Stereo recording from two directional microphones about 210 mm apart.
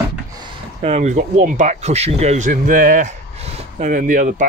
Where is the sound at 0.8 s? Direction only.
30° right (ahead or behind).